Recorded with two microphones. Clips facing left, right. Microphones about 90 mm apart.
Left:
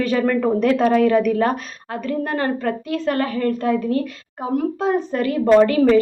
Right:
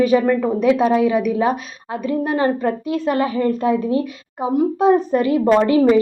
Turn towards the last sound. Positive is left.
turn(degrees=-15)  # may be behind; listen again after turning